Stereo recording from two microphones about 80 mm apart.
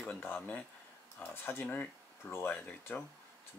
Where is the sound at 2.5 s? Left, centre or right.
Centre.